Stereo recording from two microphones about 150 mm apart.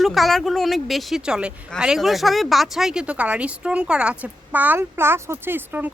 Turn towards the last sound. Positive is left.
turn(degrees=-15)  # may be behind; listen again after turning